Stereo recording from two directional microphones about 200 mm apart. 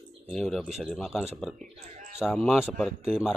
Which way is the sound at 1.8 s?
35° right (ahead or behind).